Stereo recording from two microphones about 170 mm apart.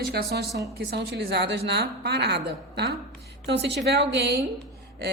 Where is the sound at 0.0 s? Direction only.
65° right (ahead or behind).